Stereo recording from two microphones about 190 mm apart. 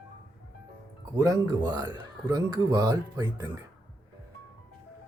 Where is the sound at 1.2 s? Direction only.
20° right (ahead or behind).